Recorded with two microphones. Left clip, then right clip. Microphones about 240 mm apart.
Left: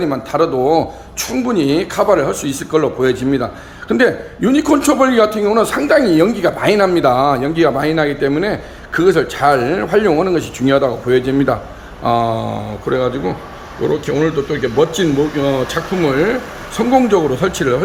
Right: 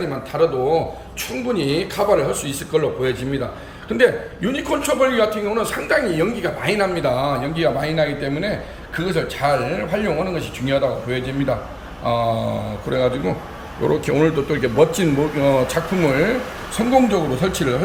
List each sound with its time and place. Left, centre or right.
0.0 s a man's voice: centre